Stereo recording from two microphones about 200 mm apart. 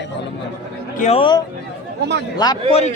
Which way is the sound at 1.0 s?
30° left (ahead or behind).